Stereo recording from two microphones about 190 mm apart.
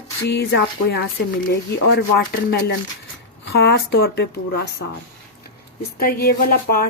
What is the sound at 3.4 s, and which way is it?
Speech, 60° left (ahead or behind).